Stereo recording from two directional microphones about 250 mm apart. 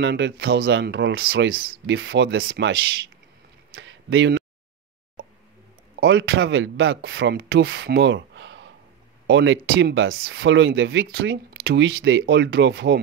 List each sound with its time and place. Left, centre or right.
0.0 s speech: right
3.7 s a sound: right
5.9 s speech: right